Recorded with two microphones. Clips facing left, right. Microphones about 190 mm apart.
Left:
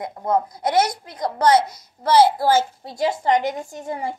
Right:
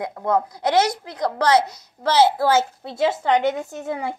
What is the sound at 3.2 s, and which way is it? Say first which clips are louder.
Speech: right 1 dB; 65° right (ahead or behind).